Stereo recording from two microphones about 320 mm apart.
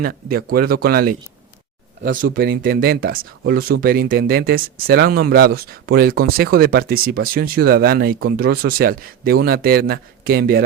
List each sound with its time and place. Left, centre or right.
0.0 s speech: right